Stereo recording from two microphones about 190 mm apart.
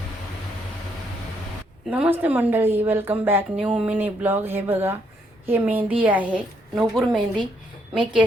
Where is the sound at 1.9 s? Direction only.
10° right (ahead or behind).